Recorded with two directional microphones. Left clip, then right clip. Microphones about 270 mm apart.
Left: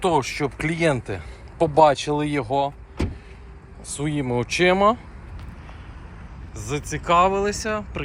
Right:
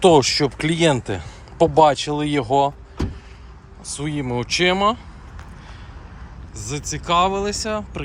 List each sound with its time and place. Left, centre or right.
0.0 s speech: right
3.8 s speech: centre
6.6 s speech: centre